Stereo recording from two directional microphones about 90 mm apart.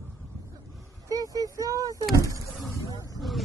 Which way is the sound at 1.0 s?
40° right (ahead or behind).